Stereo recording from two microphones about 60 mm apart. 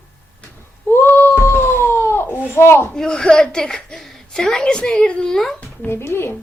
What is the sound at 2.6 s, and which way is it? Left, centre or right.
Speech, left.